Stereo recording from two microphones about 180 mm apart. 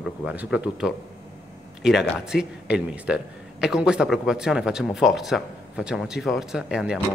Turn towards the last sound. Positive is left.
turn(degrees=-5)  # may be behind; listen again after turning